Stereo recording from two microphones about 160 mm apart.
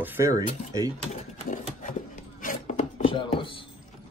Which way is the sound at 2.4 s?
55° left (ahead or behind).